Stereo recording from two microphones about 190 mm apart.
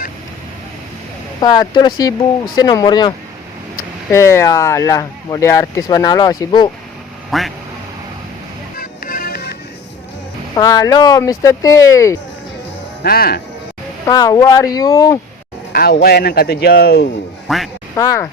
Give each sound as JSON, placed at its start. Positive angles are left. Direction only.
{"t": 1.4, "sound": "speech", "side_deg": 20}
{"t": 7.3, "sound": "speech", "side_deg": 0}
{"t": 8.8, "sound": "music", "side_deg": 50}
{"t": 10.5, "sound": "speech", "side_deg": 20}
{"t": 13.0, "sound": "speech", "side_deg": 55}
{"t": 14.1, "sound": "speech", "side_deg": 20}
{"t": 15.7, "sound": "speech", "side_deg": 55}
{"t": 17.5, "sound": "speech", "side_deg": 0}
{"t": 17.9, "sound": "speech", "side_deg": 15}